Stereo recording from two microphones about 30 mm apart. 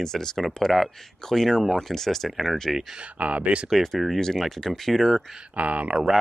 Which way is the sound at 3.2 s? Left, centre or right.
Right.